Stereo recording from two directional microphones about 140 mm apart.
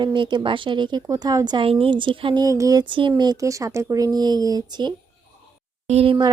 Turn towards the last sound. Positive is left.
turn(degrees=-35)  # may be behind; listen again after turning